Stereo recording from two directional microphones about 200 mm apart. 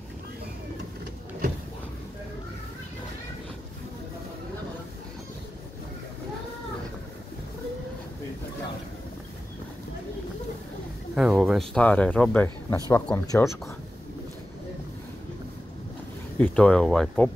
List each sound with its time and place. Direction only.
11.1 s speech: centre (ahead or behind); by 13.5 s 15° left (ahead or behind)
16.3 s speech: 5° left (ahead or behind)